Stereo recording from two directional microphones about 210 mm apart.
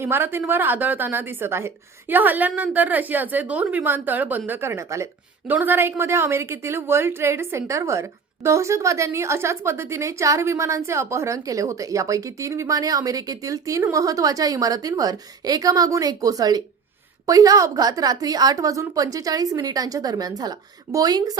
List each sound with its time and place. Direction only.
0.0 s a woman's voice: 10° right (ahead or behind)